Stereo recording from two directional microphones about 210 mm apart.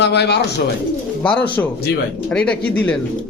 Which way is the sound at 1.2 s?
5° left (ahead or behind).